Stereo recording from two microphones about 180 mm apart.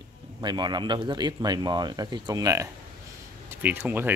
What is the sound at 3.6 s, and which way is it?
Speech, 10° right (ahead or behind).